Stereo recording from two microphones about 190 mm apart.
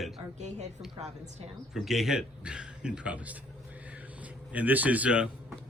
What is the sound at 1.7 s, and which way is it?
A man's voice, centre (ahead or behind).